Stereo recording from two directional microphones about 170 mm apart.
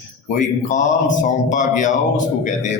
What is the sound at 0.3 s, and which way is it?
Speech, 45° left (ahead or behind).